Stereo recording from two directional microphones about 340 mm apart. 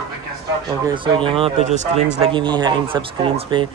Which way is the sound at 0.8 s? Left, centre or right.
Centre.